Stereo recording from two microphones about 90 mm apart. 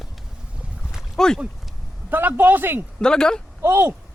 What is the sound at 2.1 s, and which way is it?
Speech, 20° right (ahead or behind).